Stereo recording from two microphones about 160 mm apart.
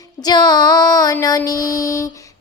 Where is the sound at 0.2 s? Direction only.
25° left (ahead or behind).